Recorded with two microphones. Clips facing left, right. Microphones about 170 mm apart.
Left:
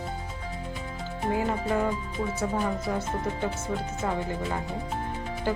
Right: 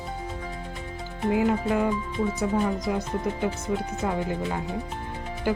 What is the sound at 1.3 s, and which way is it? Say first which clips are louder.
Speech: right 4 dB; 15° right (ahead or behind).